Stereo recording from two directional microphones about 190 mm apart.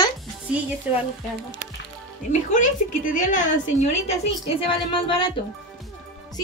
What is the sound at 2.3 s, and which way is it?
A woman's voice, 40° left (ahead or behind).